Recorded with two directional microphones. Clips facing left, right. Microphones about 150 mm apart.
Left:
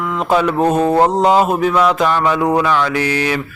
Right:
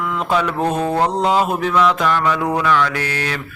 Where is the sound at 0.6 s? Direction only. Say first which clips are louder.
Left 5 dB; 40° left (ahead or behind).